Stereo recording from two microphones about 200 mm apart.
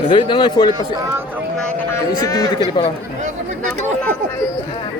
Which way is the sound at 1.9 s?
15° left (ahead or behind).